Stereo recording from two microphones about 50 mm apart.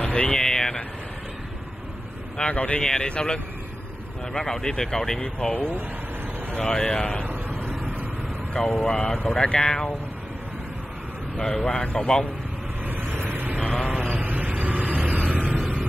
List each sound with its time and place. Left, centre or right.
0.0 s a sound: centre
2.3 s speech: left
5.5 s speech: left
7.2 s vehicle: right
7.8 s vehicle: right
8.6 s speech: centre
11.3 s speech: centre
12.8 s vehicle: right
13.6 s vehicle: centre
14.1 s vehicle: right